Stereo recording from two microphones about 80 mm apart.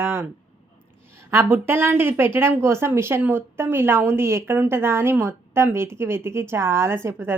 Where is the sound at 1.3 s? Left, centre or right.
Right.